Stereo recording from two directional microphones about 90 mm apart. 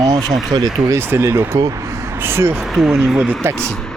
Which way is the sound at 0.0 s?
45° right (ahead or behind).